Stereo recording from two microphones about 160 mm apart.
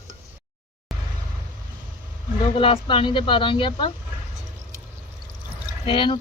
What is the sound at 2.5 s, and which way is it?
Speech, 35° left (ahead or behind).